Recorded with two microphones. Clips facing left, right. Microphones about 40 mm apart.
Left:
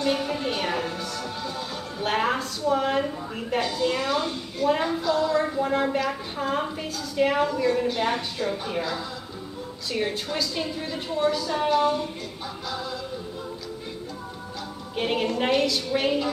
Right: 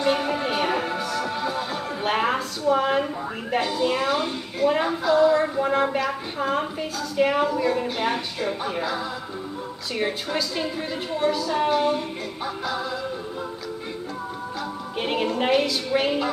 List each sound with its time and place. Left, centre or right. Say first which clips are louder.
0.0 s music: right 3 dB; centre
2.0 s a sound: right 1 dB; centre
9.9 s a woman's voice: right 2 dB; centre
15.0 s a woman's voice: even; centre